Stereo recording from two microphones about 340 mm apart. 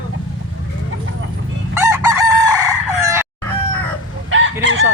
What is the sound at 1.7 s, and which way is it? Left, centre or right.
Chicken, centre.